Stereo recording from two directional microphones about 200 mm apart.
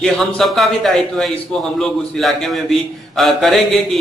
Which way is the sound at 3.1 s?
Centre (ahead or behind).